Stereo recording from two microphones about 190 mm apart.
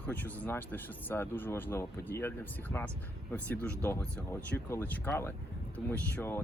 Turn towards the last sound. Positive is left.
turn(degrees=10)  # may be behind; listen again after turning